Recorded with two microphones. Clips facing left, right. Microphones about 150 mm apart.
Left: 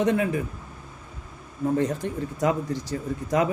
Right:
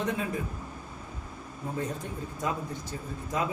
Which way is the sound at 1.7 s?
80° left.